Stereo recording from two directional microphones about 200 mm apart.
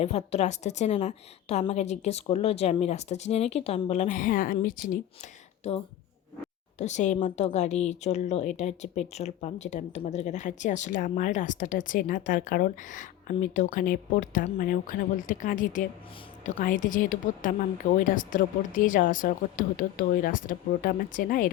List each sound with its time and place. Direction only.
0.0 s a woman's voice: 30° left (ahead or behind)
5.2 s a woman's voice: 30° left (ahead or behind)